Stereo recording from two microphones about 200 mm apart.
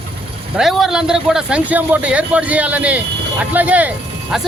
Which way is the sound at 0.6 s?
Centre (ahead or behind).